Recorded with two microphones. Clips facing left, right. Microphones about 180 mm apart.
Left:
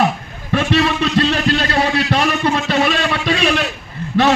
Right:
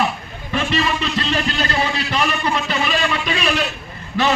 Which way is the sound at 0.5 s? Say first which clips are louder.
Left 5 dB; 65° left (ahead or behind).